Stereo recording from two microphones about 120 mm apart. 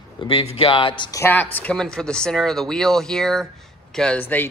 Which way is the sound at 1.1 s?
20° left (ahead or behind).